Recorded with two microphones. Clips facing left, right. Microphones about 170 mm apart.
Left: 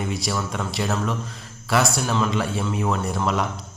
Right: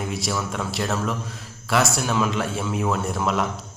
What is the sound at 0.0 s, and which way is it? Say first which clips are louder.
A man's voice: even; centre (ahead or behind).